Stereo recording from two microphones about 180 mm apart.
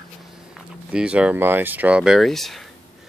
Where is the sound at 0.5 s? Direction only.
5° right (ahead or behind).